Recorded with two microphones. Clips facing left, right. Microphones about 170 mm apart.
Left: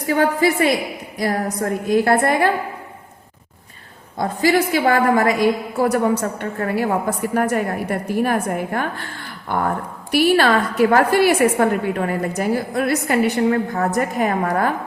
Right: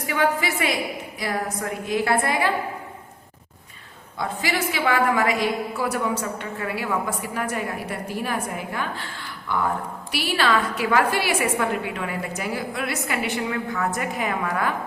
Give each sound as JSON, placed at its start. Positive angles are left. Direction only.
{"t": 0.1, "sound": "a woman's voice", "side_deg": 40}
{"t": 4.2, "sound": "a woman's voice", "side_deg": 40}